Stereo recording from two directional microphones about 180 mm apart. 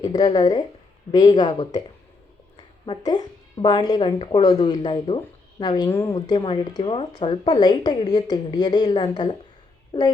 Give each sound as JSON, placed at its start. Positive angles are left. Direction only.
{"t": 0.0, "sound": "a woman's voice", "side_deg": 20}
{"t": 5.9, "sound": "a woman's voice", "side_deg": 15}
{"t": 6.1, "sound": "speech", "side_deg": 25}